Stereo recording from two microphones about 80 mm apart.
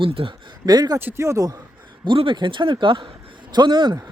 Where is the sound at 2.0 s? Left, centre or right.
Right.